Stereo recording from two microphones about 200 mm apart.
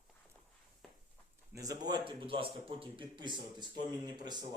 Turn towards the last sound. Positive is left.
turn(degrees=-20)  # may be behind; listen again after turning